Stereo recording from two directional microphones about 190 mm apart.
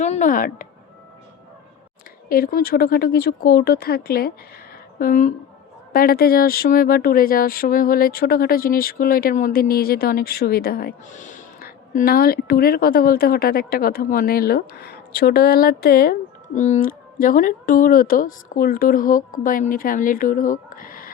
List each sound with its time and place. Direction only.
0.0 s speech: 40° left (ahead or behind)
2.3 s speech: 50° left (ahead or behind)
16.6 s speech: 40° left (ahead or behind)